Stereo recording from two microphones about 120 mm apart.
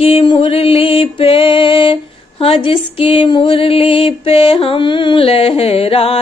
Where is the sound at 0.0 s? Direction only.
50° left (ahead or behind).